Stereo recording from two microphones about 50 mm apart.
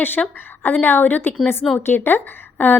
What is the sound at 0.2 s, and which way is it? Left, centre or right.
Speech, centre.